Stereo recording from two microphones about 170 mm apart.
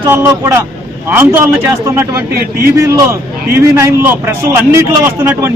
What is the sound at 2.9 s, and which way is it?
A man's voice, 15° right (ahead or behind).